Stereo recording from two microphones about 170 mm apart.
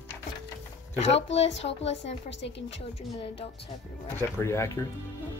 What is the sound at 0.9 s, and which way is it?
Speech, 40° left (ahead or behind).